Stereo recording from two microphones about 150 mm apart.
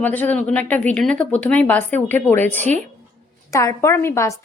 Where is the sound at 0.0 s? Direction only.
10° left (ahead or behind).